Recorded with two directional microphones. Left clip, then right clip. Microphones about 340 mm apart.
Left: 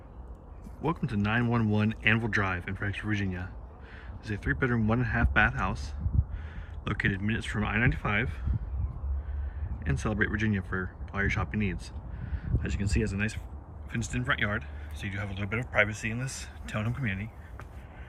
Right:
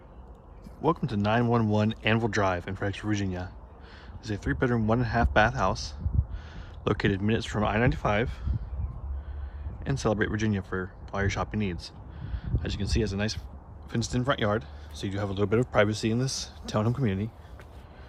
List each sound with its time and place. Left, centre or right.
0.8 s speech: centre
9.8 s speech: centre